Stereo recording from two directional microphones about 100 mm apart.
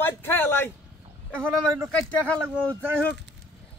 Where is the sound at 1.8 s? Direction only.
10° left (ahead or behind).